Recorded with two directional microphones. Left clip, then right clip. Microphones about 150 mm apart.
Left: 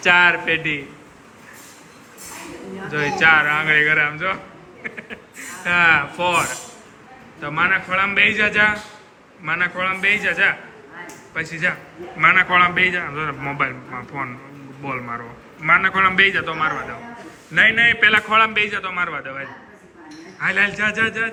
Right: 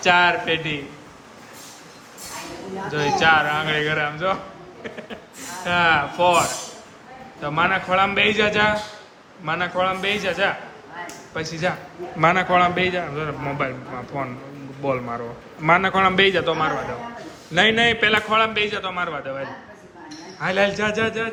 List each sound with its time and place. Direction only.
0.0 s a man's voice: 10° right (ahead or behind)
2.9 s a man's voice: 10° right (ahead or behind); by 17.9 s 35° right (ahead or behind)
18.0 s a man's voice: 20° right (ahead or behind)